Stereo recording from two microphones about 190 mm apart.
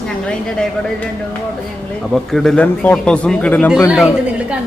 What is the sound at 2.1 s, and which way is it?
Speech, centre (ahead or behind).